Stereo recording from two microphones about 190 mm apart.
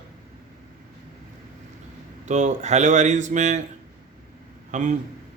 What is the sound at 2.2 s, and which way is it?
A man's voice, 40° right (ahead or behind).